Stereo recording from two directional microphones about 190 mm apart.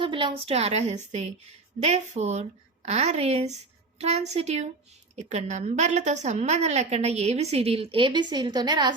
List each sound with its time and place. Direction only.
0.0 s a woman's voice: 25° right (ahead or behind)